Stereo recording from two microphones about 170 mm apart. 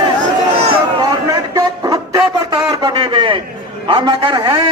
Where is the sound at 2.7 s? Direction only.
25° right (ahead or behind).